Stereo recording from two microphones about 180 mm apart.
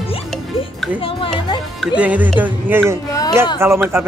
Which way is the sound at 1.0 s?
30° left (ahead or behind).